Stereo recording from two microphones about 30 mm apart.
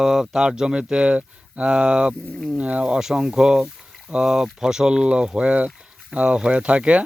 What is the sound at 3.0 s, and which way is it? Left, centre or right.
Speech, right.